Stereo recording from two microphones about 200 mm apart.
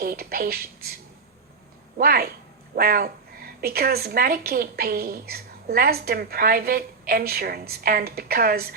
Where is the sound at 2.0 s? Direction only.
50° right (ahead or behind).